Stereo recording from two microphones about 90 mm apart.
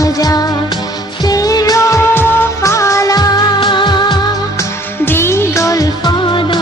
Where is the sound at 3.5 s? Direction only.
60° left (ahead or behind).